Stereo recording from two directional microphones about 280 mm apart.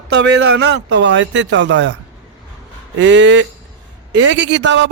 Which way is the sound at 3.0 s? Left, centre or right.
Right.